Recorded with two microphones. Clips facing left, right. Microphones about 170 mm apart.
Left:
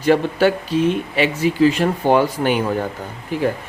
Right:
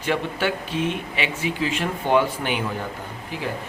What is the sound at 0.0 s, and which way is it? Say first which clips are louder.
Speech: left 9 dB; 40° left (ahead or behind).